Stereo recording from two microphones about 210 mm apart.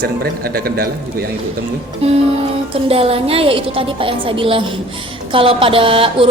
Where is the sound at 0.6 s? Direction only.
50° right (ahead or behind).